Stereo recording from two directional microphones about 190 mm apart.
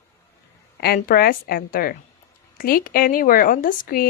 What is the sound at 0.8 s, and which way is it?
A woman's voice, 55° left (ahead or behind).